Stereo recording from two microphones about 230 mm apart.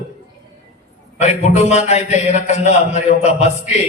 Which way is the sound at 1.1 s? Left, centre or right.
Left.